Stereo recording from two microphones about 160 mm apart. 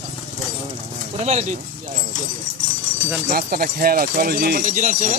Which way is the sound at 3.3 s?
65° right (ahead or behind).